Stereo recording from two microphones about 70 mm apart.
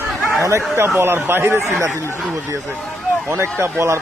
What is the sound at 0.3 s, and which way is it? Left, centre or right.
Speech, right.